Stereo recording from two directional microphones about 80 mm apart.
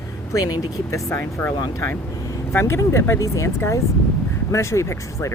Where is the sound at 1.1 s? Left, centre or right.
Left.